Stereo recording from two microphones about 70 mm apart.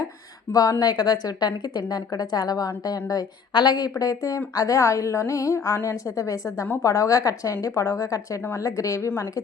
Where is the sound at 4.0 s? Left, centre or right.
Left.